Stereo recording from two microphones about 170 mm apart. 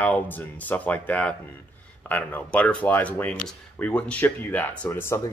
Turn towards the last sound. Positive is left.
turn(degrees=15)  # may be behind; listen again after turning